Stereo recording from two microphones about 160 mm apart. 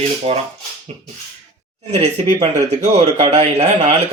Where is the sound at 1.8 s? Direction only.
40° right (ahead or behind).